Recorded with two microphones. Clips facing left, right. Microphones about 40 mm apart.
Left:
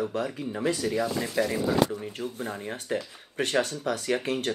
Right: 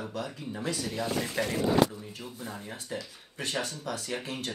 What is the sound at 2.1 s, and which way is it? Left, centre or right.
Speech, left.